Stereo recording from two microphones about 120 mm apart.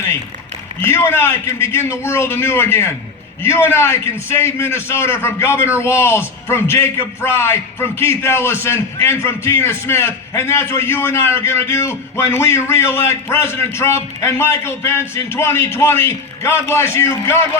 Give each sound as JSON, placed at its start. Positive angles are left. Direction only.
{"t": 0.8, "sound": "a man's voice", "side_deg": 20}